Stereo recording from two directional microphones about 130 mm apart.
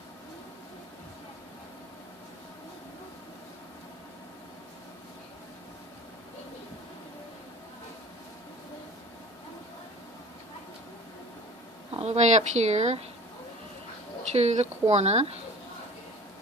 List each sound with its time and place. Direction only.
11.9 s speech: 55° right (ahead or behind)
14.3 s speech: 55° right (ahead or behind)